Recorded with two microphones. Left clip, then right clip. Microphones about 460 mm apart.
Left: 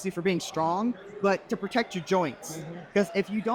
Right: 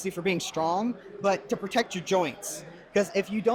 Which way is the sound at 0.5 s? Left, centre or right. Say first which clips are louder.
Even; centre.